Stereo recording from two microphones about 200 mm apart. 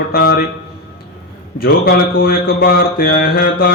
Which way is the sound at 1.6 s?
45° left (ahead or behind).